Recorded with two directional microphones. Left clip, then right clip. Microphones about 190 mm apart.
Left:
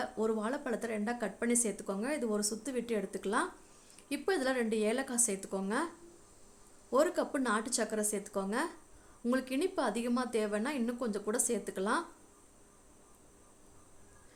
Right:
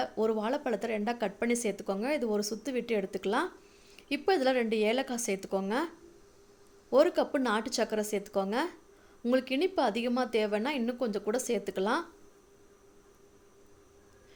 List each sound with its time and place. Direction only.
0.0 s speech: 20° right (ahead or behind)
6.9 s speech: 20° right (ahead or behind)